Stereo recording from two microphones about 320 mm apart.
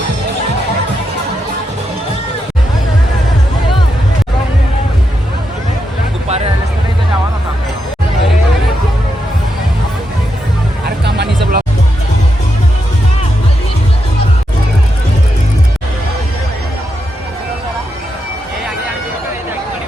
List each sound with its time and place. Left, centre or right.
10.8 s vehicle: right